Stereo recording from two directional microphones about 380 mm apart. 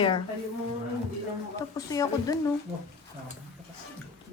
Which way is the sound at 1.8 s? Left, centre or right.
Centre.